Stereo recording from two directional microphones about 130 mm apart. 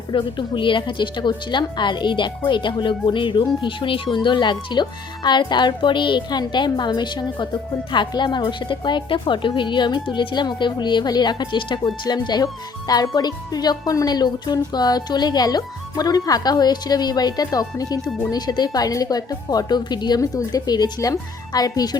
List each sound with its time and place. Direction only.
0.1 s a woman's voice: 40° left (ahead or behind)